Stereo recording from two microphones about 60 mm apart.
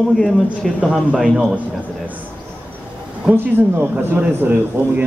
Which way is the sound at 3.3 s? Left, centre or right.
Right.